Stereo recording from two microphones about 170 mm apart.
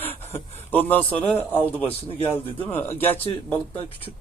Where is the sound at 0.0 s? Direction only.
10° left (ahead or behind).